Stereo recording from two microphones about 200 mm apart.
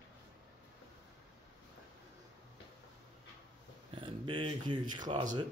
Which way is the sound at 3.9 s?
25° right (ahead or behind).